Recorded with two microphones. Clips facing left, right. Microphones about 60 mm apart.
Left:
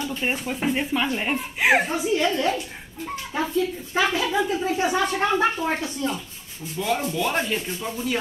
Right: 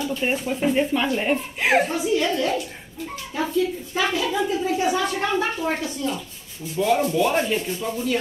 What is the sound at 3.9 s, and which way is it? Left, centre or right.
Speech, left.